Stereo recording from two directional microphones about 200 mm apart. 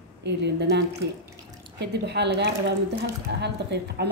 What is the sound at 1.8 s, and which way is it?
A woman's voice, 55° right (ahead or behind).